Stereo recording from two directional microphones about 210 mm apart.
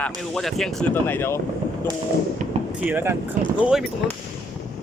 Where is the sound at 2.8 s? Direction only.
10° right (ahead or behind).